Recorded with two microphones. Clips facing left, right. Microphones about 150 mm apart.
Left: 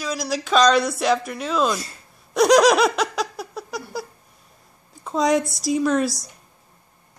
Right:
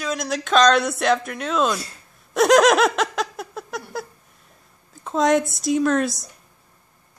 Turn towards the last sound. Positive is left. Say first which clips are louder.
# right 1 dB
turn(degrees=0)  # may be behind; listen again after turning